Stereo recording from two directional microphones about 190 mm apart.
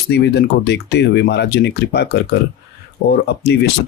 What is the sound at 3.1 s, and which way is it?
Speech, 60° left (ahead or behind).